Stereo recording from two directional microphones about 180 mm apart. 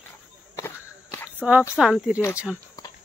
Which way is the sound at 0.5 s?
15° left (ahead or behind).